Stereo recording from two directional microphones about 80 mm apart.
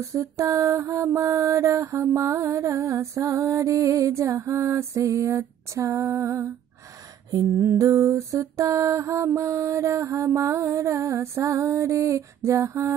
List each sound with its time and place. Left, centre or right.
0.0 s mantra: right